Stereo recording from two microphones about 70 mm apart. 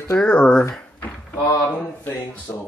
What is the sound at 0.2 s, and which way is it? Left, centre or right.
Speech, centre.